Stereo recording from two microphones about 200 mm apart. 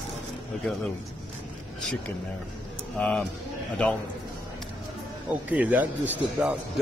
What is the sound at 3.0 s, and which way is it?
Speech, 5° left (ahead or behind).